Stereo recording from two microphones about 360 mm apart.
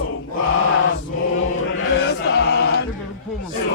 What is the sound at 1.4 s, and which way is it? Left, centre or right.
Chant, left.